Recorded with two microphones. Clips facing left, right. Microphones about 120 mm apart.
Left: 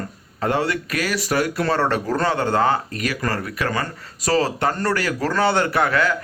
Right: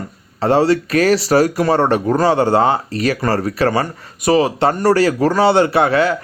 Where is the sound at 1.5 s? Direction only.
20° right (ahead or behind).